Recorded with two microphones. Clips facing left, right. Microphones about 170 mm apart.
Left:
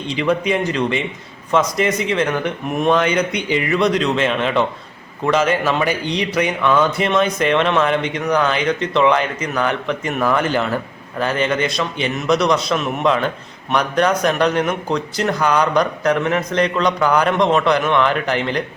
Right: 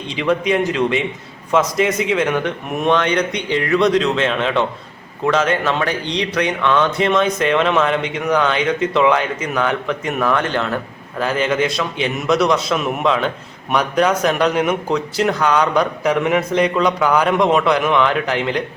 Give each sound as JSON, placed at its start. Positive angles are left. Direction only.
{"t": 0.1, "sound": "a man's voice", "side_deg": 0}